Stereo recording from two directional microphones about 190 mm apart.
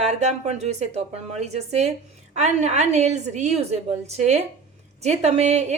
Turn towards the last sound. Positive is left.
turn(degrees=-35)  # may be behind; listen again after turning